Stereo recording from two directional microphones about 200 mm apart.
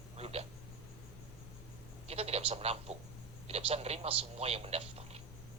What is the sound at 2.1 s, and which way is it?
A man's voice, 30° right (ahead or behind).